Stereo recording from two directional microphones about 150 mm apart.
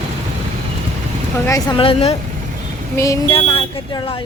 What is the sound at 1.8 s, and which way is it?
Speech, 35° left (ahead or behind).